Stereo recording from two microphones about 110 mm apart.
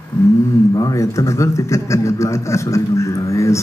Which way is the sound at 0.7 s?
30° left (ahead or behind).